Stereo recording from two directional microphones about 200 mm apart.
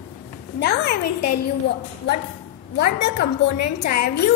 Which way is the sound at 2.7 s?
50° left (ahead or behind).